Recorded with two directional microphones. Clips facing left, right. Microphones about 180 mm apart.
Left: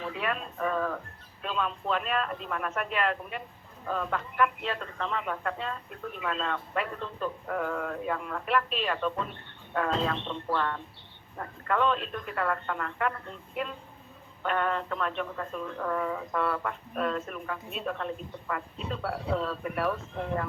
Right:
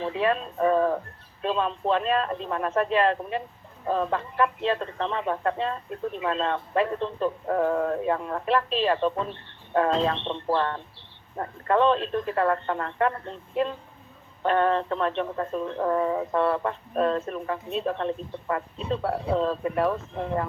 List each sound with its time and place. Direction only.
0.0 s speech: 25° right (ahead or behind)